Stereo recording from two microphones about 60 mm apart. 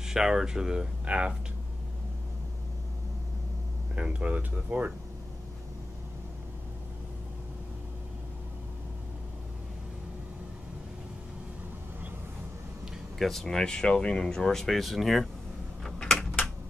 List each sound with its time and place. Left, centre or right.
0.0 s speech: centre
3.9 s speech: centre
13.2 s speech: centre
15.8 s typing: centre